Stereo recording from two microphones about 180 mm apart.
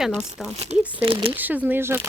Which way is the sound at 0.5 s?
35° right (ahead or behind).